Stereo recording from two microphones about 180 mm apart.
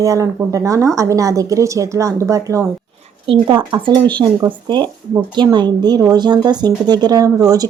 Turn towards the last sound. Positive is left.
turn(degrees=-20)  # may be behind; listen again after turning